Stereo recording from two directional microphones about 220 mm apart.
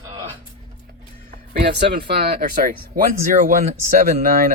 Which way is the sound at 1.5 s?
50° right (ahead or behind).